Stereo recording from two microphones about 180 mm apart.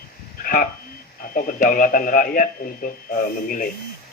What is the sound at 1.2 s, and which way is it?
Speech, 50° left (ahead or behind).